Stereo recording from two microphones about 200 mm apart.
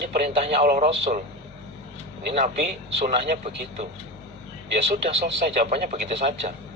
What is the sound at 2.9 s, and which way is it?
Speech, 35° right (ahead or behind).